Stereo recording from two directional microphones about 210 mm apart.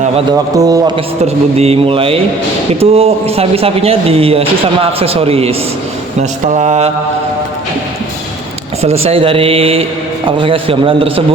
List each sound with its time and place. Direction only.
0.5 s speech: 15° right (ahead or behind)
6.5 s mantra: 35° right (ahead or behind)
8.8 s speech: 30° right (ahead or behind)